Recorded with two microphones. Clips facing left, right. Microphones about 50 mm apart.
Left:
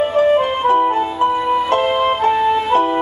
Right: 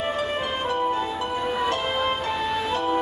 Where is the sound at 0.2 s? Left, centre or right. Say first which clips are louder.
Left 12 dB; left.